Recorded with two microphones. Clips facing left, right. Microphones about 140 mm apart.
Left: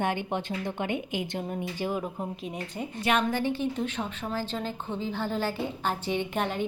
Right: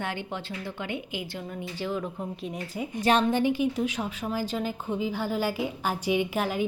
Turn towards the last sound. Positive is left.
turn(degrees=-5)  # may be behind; listen again after turning